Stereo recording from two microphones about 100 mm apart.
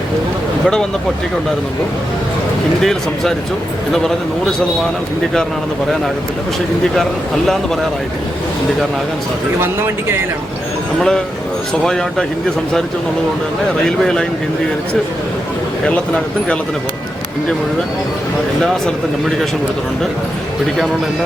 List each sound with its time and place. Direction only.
2.8 s speech: 5° left (ahead or behind)
6.9 s speech: 5° left (ahead or behind)
9.6 s speech: 25° right (ahead or behind)
11.7 s speech: 5° left (ahead or behind)
13.8 s speech: 5° left (ahead or behind)